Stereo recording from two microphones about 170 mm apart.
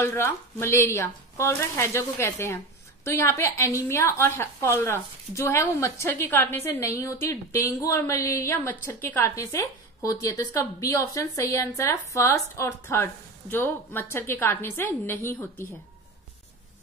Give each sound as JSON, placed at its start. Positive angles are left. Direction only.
{"t": 0.0, "sound": "a woman's voice", "side_deg": 15}